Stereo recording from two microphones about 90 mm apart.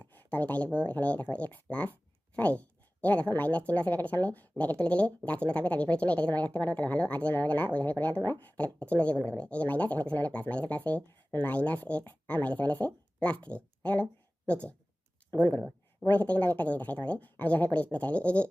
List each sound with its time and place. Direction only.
0.0 s speech: 20° left (ahead or behind)